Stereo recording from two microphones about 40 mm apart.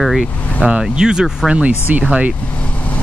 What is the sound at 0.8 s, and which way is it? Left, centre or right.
Speech, centre.